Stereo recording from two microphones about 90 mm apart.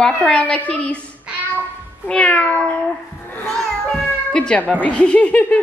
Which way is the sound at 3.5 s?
5° left (ahead or behind).